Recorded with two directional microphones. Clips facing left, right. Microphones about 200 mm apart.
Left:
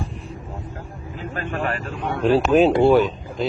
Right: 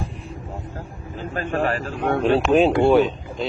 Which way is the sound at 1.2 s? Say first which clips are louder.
Right 3 dB; 35° right (ahead or behind).